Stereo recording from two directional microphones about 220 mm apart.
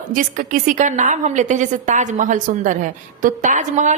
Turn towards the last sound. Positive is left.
turn(degrees=-35)  # may be behind; listen again after turning